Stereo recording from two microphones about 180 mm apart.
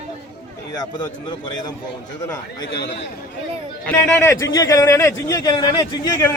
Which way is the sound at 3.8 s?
15° left (ahead or behind).